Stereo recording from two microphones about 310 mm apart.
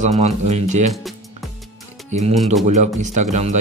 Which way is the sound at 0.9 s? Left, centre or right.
Centre.